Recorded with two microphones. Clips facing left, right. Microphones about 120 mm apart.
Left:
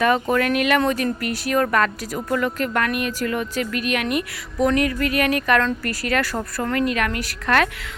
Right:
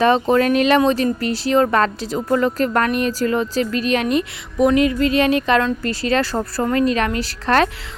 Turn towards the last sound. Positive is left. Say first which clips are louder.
# right 3 dB
turn(degrees=-30)  # may be behind; listen again after turning